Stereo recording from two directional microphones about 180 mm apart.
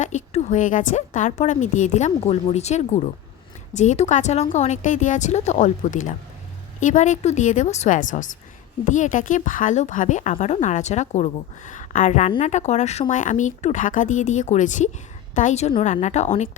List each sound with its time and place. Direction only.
0.0 s a woman's voice: 40° left (ahead or behind)